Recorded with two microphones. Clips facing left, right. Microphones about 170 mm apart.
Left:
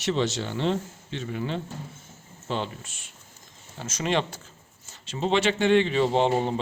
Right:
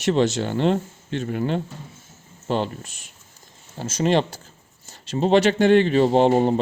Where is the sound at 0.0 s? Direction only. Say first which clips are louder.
Right 6 dB; 50° right (ahead or behind).